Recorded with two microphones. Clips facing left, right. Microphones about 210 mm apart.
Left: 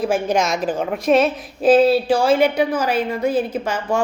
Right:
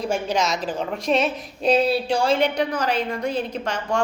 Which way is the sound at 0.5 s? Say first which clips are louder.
Left 5 dB; 10° left (ahead or behind).